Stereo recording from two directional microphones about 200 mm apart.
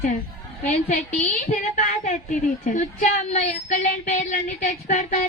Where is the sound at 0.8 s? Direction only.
40° left (ahead or behind).